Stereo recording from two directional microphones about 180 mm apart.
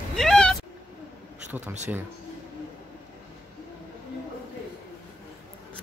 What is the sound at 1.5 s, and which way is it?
Speech, 10° right (ahead or behind).